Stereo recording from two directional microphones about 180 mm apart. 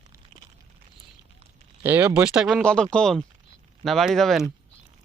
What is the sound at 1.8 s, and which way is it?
Speech, 10° right (ahead or behind).